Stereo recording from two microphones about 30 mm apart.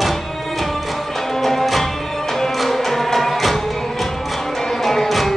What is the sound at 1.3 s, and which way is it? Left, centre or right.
Music, centre.